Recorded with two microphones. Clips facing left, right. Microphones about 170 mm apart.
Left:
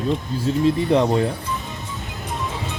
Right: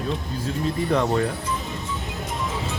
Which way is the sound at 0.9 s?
20° left (ahead or behind).